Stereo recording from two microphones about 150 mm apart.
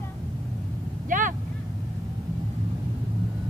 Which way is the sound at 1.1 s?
60° right (ahead or behind).